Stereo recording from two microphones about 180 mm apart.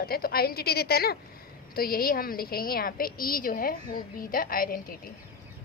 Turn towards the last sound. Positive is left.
turn(degrees=55)  # may be behind; listen again after turning